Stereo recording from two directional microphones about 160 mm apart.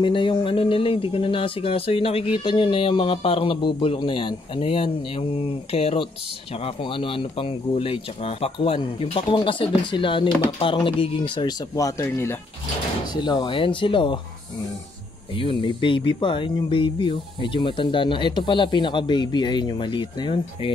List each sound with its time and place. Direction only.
0.0 s speech: 30° left (ahead or behind)
15.3 s speech: 35° left (ahead or behind)